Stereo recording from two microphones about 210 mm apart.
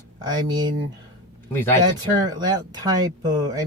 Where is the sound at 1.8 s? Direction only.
20° right (ahead or behind).